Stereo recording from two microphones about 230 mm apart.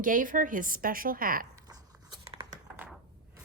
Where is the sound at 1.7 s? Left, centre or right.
Centre.